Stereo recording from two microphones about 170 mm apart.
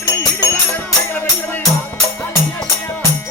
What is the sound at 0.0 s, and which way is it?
Music, 20° left (ahead or behind).